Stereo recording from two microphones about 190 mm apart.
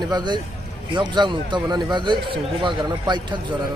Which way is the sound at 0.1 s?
25° right (ahead or behind).